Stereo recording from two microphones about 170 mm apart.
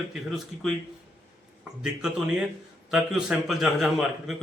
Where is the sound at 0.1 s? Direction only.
Centre (ahead or behind).